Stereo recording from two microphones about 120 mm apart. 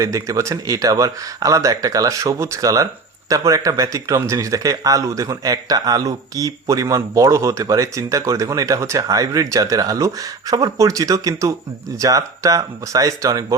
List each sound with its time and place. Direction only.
0.0 s speech: 25° right (ahead or behind)